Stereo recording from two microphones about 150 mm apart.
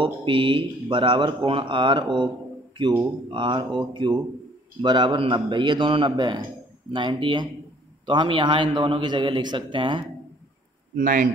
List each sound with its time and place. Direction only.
0.0 s speech: 35° right (ahead or behind)
3.3 s speech: 35° right (ahead or behind)
11.0 s a man's voice: 60° right (ahead or behind)